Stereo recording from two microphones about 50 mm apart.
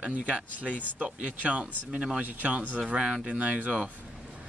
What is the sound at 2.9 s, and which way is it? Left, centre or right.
Speech, centre.